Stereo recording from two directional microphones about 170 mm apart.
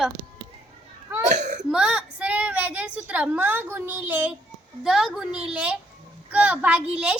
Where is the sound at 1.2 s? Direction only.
45° right (ahead or behind).